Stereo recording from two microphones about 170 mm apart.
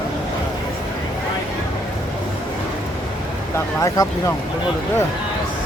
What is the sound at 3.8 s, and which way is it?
Speech, 20° left (ahead or behind).